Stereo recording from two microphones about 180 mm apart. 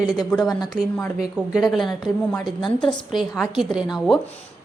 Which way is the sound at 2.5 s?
25° left (ahead or behind).